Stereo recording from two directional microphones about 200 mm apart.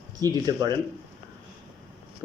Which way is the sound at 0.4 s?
20° right (ahead or behind).